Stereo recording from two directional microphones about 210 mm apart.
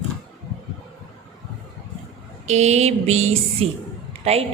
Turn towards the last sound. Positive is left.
turn(degrees=-30)  # may be behind; listen again after turning